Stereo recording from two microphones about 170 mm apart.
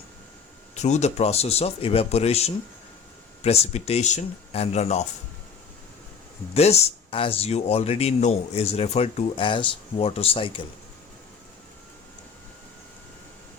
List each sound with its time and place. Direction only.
0.8 s speech: 40° left (ahead or behind)
6.5 s speech: 40° left (ahead or behind)